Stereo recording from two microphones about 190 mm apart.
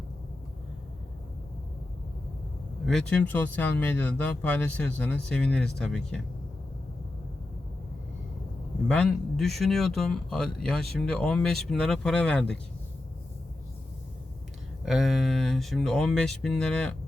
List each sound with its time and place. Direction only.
2.8 s speech: 5° left (ahead or behind)
8.9 s speech: 5° left (ahead or behind)
14.8 s speech: centre (ahead or behind)